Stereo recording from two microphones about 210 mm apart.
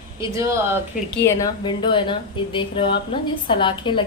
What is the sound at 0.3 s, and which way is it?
Speech, 15° right (ahead or behind).